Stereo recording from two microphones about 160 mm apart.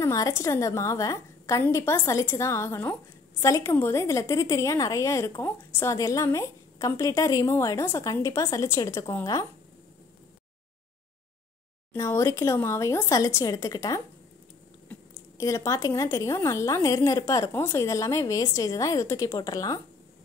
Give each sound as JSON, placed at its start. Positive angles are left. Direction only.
{"t": 0.0, "sound": "a woman's voice", "side_deg": 20}
{"t": 11.9, "sound": "a woman's voice", "side_deg": 15}